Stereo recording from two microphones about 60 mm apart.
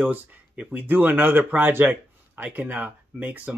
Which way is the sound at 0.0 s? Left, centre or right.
Right.